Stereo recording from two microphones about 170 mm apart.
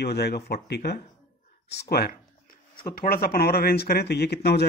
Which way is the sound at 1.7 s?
70° left (ahead or behind).